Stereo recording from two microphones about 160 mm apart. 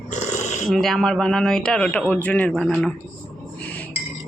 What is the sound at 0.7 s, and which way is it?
Speech, centre (ahead or behind).